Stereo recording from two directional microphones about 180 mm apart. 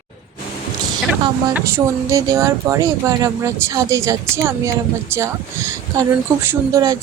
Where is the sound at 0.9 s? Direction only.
25° right (ahead or behind).